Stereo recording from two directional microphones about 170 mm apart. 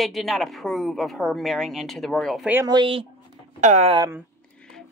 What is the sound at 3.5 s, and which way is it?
Speech, 40° right (ahead or behind).